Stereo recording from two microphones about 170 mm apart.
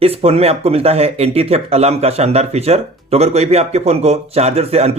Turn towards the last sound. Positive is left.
turn(degrees=-35)  # may be behind; listen again after turning